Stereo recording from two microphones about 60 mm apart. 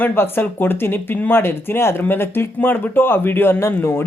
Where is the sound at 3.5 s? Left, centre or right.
Left.